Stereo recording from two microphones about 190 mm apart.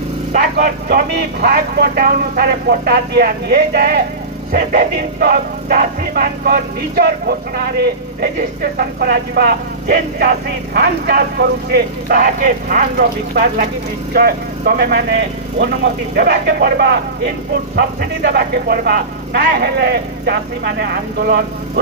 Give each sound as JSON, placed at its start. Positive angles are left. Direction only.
{"t": 0.3, "sound": "music", "side_deg": -55}
{"t": 10.1, "sound": "speech", "side_deg": -55}
{"t": 14.1, "sound": "music", "side_deg": -50}